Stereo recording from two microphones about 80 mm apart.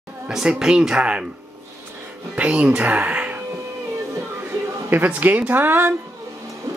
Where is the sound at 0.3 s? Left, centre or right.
Centre.